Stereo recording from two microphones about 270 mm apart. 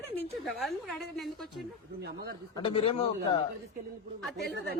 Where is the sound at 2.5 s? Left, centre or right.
Centre.